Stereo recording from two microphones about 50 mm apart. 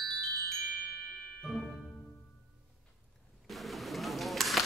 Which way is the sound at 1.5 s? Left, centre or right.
Centre.